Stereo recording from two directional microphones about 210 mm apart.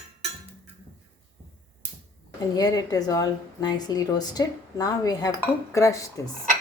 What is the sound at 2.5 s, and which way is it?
A woman's voice, 20° left (ahead or behind).